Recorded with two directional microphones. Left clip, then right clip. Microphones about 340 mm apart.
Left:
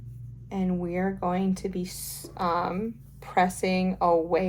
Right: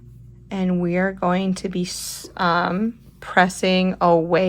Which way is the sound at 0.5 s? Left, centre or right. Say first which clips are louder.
Right 7 dB; right.